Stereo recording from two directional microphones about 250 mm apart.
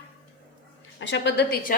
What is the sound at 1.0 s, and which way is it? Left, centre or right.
Speech, left.